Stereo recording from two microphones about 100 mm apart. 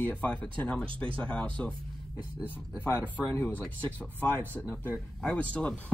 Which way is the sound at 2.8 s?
25° left (ahead or behind).